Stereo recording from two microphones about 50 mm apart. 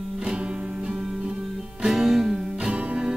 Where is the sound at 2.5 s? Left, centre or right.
Right.